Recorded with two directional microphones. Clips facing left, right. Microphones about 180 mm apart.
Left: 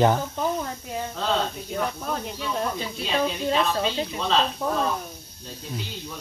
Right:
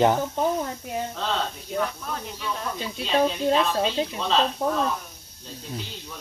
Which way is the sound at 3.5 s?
Centre (ahead or behind).